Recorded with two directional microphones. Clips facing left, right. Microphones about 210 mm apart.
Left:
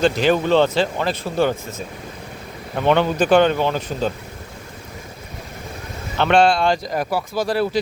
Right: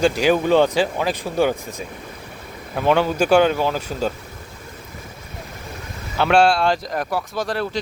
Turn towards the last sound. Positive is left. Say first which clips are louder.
# left 4 dB
turn(degrees=5)  # may be behind; listen again after turning